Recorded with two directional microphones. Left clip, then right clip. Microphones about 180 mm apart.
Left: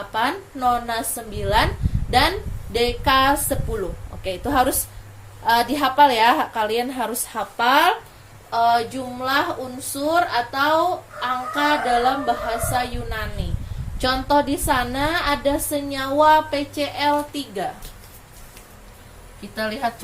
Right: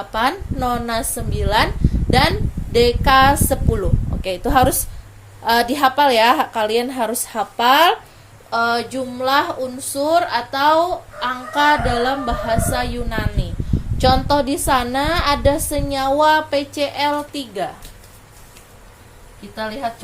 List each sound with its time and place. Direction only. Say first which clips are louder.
0.1 s a woman's voice: right 3 dB; 60° right (ahead or behind)
19.5 s a woman's voice: even; 15° right (ahead or behind)